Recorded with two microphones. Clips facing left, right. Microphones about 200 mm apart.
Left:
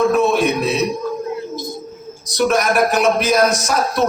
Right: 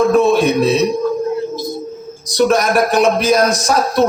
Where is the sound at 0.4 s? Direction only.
30° right (ahead or behind).